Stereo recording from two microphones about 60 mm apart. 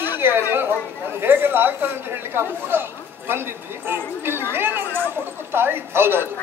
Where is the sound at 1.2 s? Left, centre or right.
Right.